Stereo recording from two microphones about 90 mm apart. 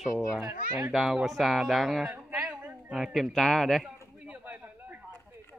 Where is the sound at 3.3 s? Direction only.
5° left (ahead or behind).